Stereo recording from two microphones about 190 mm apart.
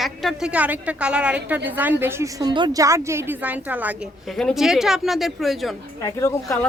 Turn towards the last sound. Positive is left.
turn(degrees=15)  # may be behind; listen again after turning